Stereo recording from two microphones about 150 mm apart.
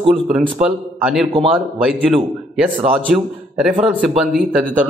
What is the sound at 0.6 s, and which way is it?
Speech, 5° right (ahead or behind).